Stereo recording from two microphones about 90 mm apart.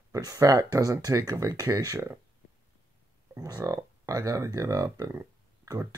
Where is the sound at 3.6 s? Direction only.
35° right (ahead or behind).